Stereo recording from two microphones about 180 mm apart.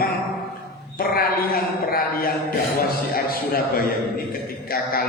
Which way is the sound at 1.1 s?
55° left (ahead or behind).